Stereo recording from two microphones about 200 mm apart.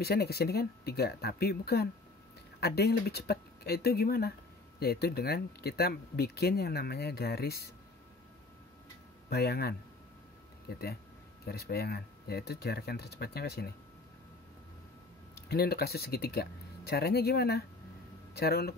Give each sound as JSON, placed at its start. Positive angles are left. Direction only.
{"t": 0.0, "sound": "speech", "side_deg": 50}
{"t": 9.3, "sound": "speech", "side_deg": 50}
{"t": 15.3, "sound": "speech", "side_deg": 55}